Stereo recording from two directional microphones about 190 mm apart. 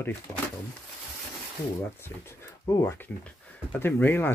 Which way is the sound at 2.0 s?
15° left (ahead or behind).